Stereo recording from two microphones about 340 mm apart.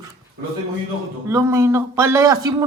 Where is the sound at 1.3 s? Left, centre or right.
Centre.